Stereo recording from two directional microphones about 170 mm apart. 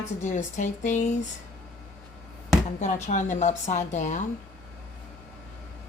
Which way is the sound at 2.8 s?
45° left (ahead or behind).